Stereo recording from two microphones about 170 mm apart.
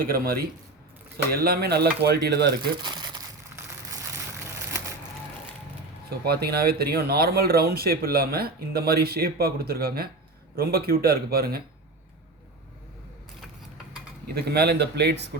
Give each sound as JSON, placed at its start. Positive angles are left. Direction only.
{"t": 0.0, "sound": "speech", "side_deg": -60}
{"t": 2.8, "sound": "crumpling", "side_deg": -25}
{"t": 6.1, "sound": "speech", "side_deg": -65}
{"t": 14.3, "sound": "speech", "side_deg": -70}